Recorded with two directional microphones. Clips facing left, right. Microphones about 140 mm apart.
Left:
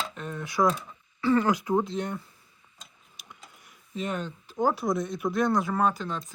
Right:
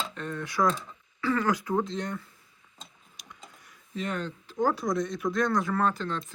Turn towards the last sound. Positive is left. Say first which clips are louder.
# left 1 dB
turn(degrees=10)  # may be behind; listen again after turning